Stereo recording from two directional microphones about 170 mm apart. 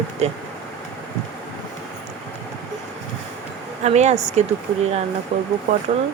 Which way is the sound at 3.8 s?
40° right (ahead or behind).